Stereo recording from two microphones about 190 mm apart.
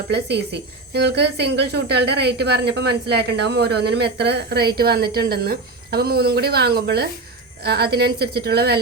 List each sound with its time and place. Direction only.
0.1 s speech: 65° right (ahead or behind)